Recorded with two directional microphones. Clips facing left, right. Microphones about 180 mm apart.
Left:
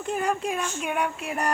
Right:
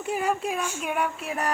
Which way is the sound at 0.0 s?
5° right (ahead or behind).